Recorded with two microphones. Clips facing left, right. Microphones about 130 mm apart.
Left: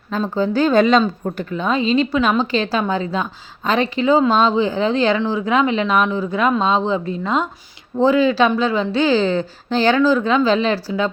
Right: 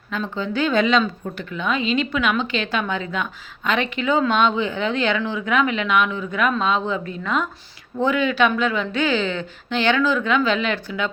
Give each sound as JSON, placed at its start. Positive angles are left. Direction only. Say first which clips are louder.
{"t": 0.1, "sound": "speech", "louder": "left 6 dB", "side_deg": 40}